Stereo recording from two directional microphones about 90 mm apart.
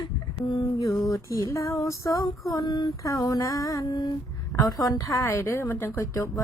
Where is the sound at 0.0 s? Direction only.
55° left (ahead or behind).